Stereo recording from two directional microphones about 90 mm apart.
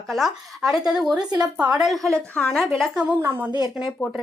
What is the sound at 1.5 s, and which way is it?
Speech, 15° right (ahead or behind).